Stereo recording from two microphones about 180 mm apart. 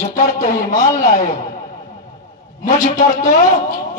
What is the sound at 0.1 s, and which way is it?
Speech, 45° left (ahead or behind).